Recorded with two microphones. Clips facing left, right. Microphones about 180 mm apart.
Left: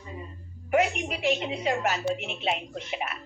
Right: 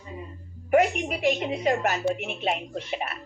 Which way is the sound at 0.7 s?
40° right (ahead or behind).